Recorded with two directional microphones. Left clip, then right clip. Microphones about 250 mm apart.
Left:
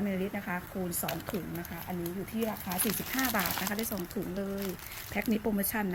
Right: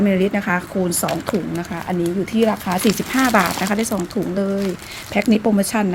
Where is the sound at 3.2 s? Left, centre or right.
Centre.